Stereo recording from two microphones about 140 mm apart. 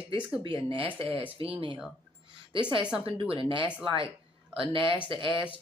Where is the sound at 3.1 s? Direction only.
40° right (ahead or behind).